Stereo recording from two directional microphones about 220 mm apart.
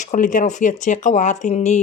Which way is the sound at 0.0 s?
35° left (ahead or behind).